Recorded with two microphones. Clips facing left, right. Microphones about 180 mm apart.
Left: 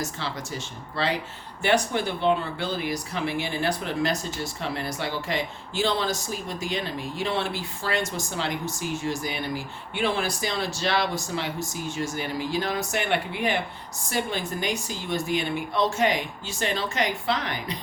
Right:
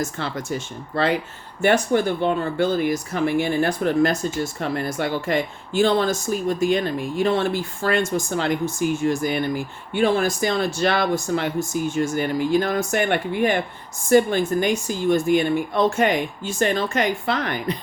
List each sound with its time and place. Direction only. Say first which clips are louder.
0.0 s speech: right 5 dB; 50° right (ahead or behind)